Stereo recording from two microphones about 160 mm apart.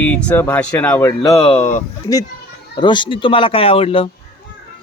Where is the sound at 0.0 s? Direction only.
10° left (ahead or behind).